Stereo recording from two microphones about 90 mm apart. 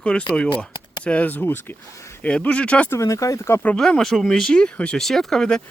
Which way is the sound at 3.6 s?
10° left (ahead or behind).